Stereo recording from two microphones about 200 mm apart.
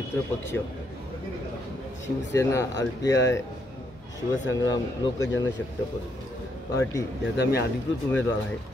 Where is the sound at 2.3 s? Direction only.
15° left (ahead or behind).